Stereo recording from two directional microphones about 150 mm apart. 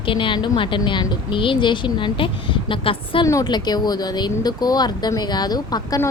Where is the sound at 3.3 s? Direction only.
25° left (ahead or behind).